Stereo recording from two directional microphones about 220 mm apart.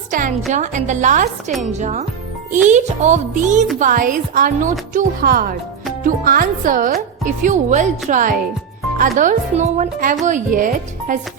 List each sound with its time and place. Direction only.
0.1 s a woman's voice: 35° right (ahead or behind)